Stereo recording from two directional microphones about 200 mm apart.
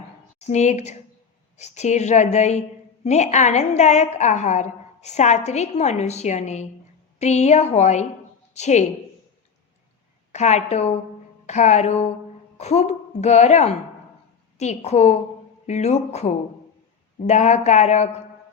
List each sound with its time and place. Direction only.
0.3 s a woman's voice: 35° left (ahead or behind)
10.3 s a woman's voice: 35° left (ahead or behind)